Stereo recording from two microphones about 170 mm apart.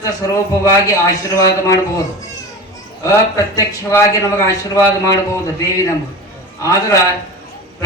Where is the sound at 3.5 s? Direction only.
15° left (ahead or behind).